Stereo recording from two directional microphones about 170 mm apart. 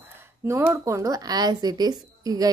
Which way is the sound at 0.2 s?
15° right (ahead or behind).